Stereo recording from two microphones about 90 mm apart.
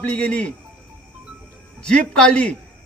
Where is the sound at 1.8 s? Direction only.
10° left (ahead or behind).